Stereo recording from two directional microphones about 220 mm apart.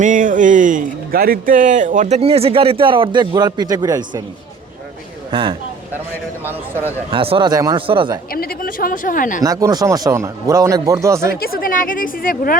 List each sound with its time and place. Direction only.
0.0 s speech: 35° right (ahead or behind); by 4.2 s 20° right (ahead or behind)
5.3 s speech: 20° right (ahead or behind)
7.1 s speech: 25° right (ahead or behind)
8.3 s a woman's voice: 40° left (ahead or behind)
9.4 s a man's voice: 15° right (ahead or behind)
11.3 s a woman's voice: 40° left (ahead or behind)